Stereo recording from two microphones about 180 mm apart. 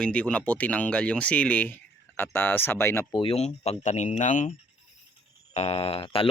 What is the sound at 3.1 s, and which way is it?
Speech, 30° left (ahead or behind).